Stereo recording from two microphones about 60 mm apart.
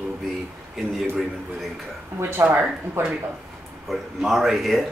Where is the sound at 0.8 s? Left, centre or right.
Centre.